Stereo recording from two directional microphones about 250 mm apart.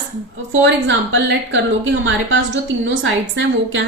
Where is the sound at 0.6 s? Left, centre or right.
Right.